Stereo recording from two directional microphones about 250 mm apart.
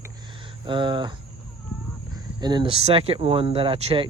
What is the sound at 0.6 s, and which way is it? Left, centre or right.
Speech, centre.